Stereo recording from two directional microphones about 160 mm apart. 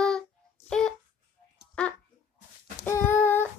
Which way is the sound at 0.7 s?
5° left (ahead or behind).